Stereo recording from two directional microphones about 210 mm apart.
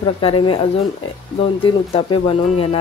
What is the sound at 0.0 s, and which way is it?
Speech, 25° left (ahead or behind).